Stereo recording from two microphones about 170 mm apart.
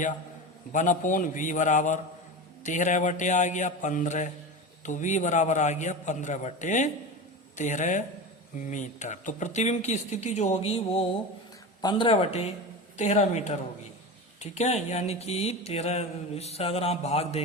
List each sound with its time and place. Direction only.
0.7 s speech: 50° left (ahead or behind)
11.8 s mantra: 25° left (ahead or behind)